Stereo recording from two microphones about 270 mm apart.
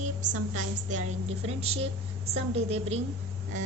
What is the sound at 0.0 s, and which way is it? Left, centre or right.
A woman's voice, right.